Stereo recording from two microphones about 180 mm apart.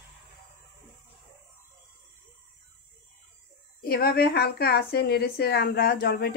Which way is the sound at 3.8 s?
55° left (ahead or behind).